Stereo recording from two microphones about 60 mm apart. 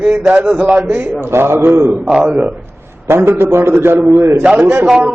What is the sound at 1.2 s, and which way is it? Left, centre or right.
Speech, right.